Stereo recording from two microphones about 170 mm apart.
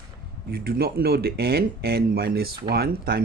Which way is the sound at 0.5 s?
60° right (ahead or behind).